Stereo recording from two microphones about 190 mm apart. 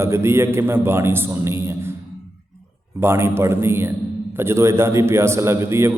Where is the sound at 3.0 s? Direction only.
15° right (ahead or behind).